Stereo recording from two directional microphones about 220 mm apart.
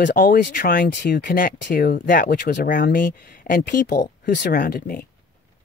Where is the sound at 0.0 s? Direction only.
40° left (ahead or behind).